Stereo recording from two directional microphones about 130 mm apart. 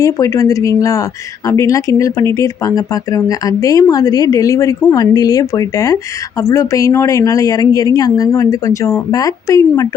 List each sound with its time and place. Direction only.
0.0 s speech: 25° left (ahead or behind)